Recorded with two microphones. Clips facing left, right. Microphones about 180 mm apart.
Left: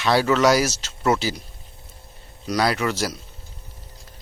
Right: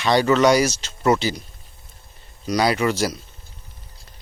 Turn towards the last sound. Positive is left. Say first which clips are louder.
# right 3 dB
turn(degrees=0)  # may be behind; listen again after turning